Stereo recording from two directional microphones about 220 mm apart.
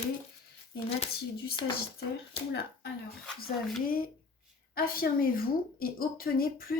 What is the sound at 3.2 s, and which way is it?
Speech, centre (ahead or behind).